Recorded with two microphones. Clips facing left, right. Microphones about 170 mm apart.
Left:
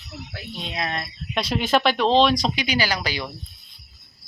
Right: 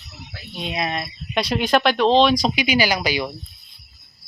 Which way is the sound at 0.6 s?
10° right (ahead or behind).